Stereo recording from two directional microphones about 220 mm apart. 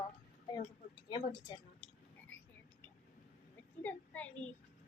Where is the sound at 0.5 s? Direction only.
20° left (ahead or behind).